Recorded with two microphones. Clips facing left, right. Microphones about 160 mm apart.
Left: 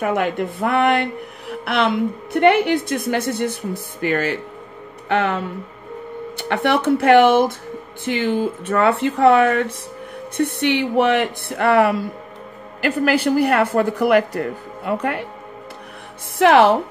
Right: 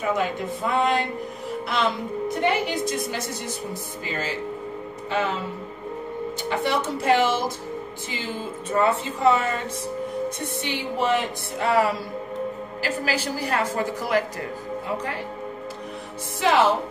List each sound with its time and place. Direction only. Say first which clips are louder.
0.0 s a woman's voice: left 5 dB; 60° left (ahead or behind)
16.3 s a woman's voice: left 7 dB; 60° left (ahead or behind)